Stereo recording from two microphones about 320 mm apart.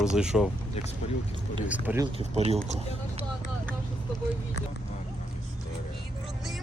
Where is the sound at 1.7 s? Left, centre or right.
Centre.